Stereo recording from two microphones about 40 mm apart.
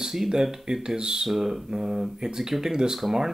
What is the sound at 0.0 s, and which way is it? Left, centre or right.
Speech, centre.